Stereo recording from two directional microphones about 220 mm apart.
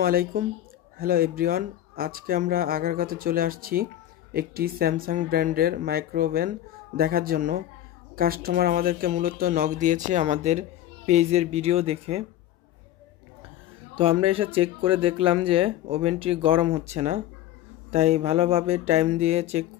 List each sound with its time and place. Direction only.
0.0 s speech: 40° right (ahead or behind)
13.9 s speech: 25° right (ahead or behind)